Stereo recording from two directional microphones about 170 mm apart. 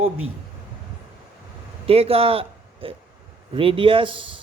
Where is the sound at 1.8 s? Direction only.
35° right (ahead or behind).